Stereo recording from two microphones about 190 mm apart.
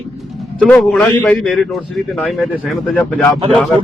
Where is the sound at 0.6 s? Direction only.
Centre (ahead or behind).